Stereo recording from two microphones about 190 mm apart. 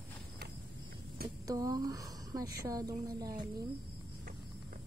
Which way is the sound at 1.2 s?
20° right (ahead or behind).